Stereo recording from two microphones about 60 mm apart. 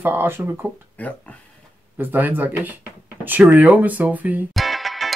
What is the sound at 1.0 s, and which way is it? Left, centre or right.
Speech, left.